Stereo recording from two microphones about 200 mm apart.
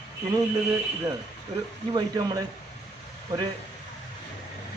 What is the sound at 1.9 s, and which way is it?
Speech, 20° right (ahead or behind).